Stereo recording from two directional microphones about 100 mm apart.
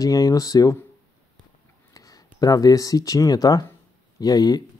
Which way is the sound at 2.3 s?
40° left (ahead or behind).